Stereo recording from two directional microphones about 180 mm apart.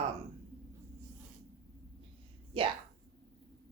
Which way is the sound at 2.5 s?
30° right (ahead or behind).